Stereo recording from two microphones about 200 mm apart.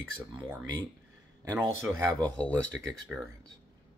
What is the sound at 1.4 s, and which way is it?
Speech, 20° right (ahead or behind).